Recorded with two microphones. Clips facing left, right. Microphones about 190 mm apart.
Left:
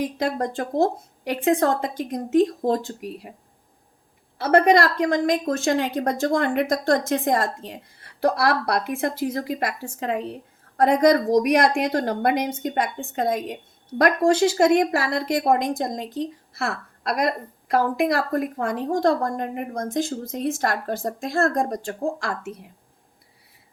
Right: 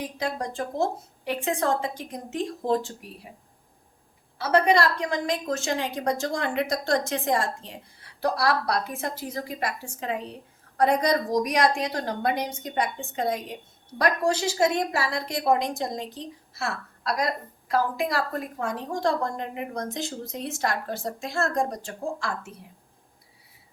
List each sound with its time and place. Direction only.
0.3 s a woman's voice: 60° left (ahead or behind)
4.4 s a woman's voice: 55° left (ahead or behind)
16.6 s a woman's voice: 60° left (ahead or behind)